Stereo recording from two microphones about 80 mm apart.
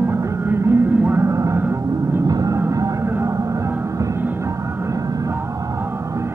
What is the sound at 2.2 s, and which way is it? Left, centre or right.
Vehicle, right.